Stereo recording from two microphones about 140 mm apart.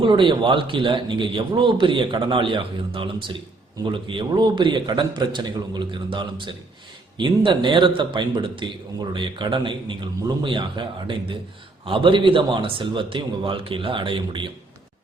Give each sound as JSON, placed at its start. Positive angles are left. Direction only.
{"t": 0.0, "sound": "a man's voice", "side_deg": -35}